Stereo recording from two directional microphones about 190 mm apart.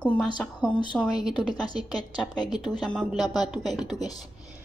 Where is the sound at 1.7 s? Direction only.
20° left (ahead or behind).